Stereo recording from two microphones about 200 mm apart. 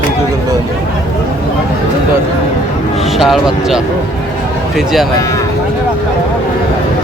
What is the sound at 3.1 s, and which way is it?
Speech, centre (ahead or behind).